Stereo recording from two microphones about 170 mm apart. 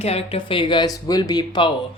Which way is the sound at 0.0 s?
35° left (ahead or behind).